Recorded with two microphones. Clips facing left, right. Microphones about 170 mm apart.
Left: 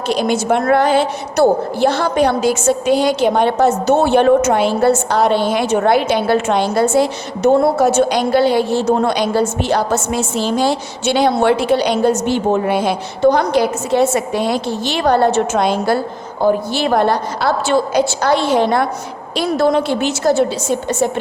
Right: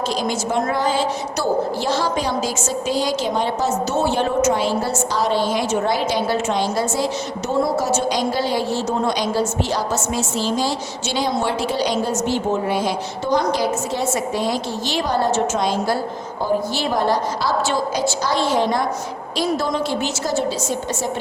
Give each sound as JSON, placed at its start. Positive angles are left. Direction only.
{"t": 0.1, "sound": "a woman's voice", "side_deg": 65}